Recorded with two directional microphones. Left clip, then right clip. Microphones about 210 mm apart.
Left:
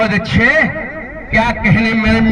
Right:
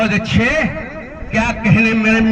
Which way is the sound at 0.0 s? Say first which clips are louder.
Left 3 dB; 55° right (ahead or behind).